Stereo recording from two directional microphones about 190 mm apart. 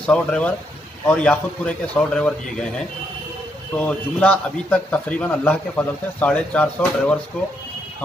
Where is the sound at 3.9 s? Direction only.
5° left (ahead or behind).